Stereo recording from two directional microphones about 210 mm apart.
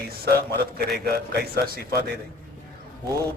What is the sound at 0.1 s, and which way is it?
A man's voice, 45° right (ahead or behind).